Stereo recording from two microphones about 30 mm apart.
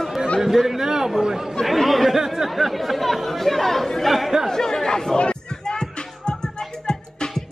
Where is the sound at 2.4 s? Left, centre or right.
Centre.